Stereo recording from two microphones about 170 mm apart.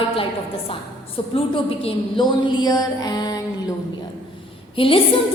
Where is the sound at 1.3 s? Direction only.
35° left (ahead or behind).